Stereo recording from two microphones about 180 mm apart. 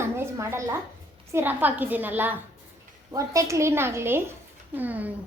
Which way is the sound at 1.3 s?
10° right (ahead or behind).